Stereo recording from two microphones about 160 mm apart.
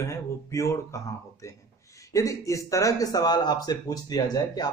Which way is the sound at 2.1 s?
20° left (ahead or behind).